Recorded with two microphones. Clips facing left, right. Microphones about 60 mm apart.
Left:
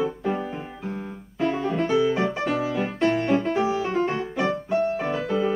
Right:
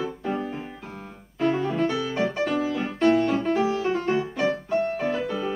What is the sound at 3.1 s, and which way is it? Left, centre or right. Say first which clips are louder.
Music: right 3 dB; left.